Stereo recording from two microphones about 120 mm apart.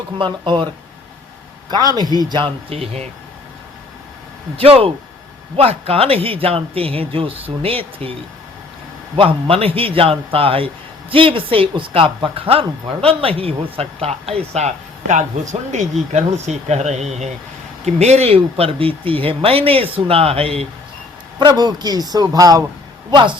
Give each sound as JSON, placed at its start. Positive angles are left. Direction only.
{"t": 0.4, "sound": "a man's voice", "side_deg": -40}
{"t": 1.7, "sound": "a man's voice", "side_deg": -35}
{"t": 2.6, "sound": "speech", "side_deg": -55}
{"t": 4.5, "sound": "speech", "side_deg": -55}
{"t": 9.1, "sound": "speech", "side_deg": -55}
{"t": 21.3, "sound": "a man's voice", "side_deg": -35}